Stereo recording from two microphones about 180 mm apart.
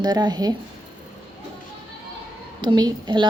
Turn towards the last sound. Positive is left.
turn(degrees=-25)  # may be behind; listen again after turning